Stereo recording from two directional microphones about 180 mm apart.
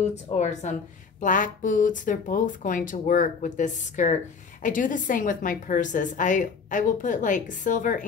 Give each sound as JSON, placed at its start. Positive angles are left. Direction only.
{"t": 0.0, "sound": "a woman's voice", "side_deg": 40}